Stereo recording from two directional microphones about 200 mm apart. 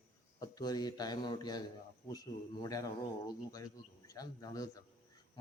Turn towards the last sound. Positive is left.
turn(degrees=20)  # may be behind; listen again after turning